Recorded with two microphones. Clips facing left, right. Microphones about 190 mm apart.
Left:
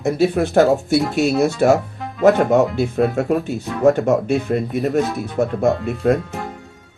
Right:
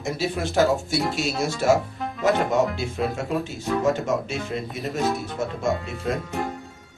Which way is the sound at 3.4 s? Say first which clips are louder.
Left 5 dB; 60° left (ahead or behind).